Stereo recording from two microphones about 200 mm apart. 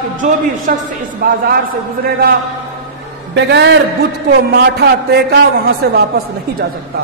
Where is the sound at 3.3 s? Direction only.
60° right (ahead or behind).